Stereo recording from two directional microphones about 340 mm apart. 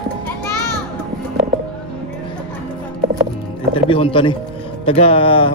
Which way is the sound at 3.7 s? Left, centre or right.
Centre.